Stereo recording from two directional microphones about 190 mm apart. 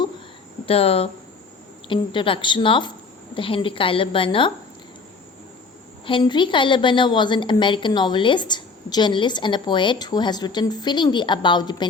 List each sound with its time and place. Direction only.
0.6 s a woman's voice: 30° left (ahead or behind)
6.1 s a woman's voice: 25° left (ahead or behind)